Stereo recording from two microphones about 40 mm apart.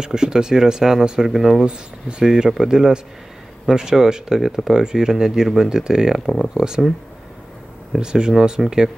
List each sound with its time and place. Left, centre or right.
0.0 s speech: centre
1.7 s speech: right
6.5 s speech: centre
8.0 s speech: centre